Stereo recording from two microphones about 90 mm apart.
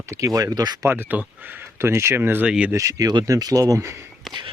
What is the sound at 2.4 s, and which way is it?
Speech, 10° right (ahead or behind).